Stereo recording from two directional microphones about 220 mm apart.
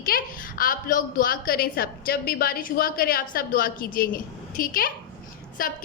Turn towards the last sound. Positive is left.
turn(degrees=40)  # may be behind; listen again after turning